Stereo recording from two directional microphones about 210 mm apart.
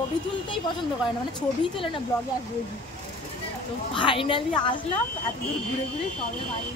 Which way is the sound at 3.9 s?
25° left (ahead or behind).